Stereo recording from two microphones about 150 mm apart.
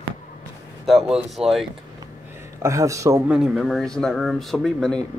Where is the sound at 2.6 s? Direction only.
20° right (ahead or behind).